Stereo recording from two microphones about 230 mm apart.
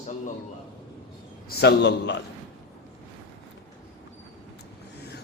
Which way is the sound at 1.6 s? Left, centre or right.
Left.